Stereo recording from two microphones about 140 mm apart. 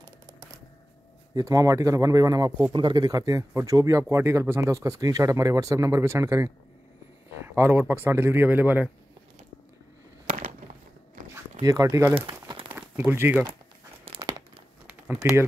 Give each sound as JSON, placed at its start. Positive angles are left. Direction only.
{"t": 0.0, "sound": "typewriter", "side_deg": -25}
{"t": 1.3, "sound": "speech", "side_deg": -25}
{"t": 10.2, "sound": "a sound", "side_deg": -70}
{"t": 11.6, "sound": "speech", "side_deg": -25}
{"t": 12.2, "sound": "crumpling", "side_deg": -35}
{"t": 12.6, "sound": "crumpling", "side_deg": -15}
{"t": 14.1, "sound": "crumpling", "side_deg": -40}
{"t": 15.2, "sound": "speech", "side_deg": -20}